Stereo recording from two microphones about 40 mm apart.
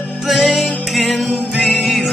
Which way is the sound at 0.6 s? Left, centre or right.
Centre.